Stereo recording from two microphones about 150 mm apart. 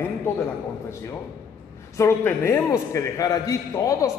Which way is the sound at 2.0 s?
15° left (ahead or behind).